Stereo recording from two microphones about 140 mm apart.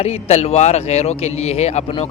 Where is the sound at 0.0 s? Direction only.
50° left (ahead or behind).